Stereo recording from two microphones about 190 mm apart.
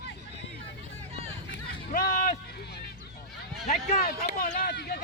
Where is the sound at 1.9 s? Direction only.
45° left (ahead or behind).